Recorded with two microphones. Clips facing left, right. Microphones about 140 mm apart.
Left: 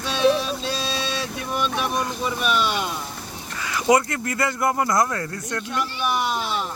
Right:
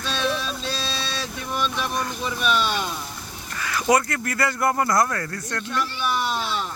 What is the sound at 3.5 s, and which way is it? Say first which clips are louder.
Speech: left 1 dB; 20° left (ahead or behind).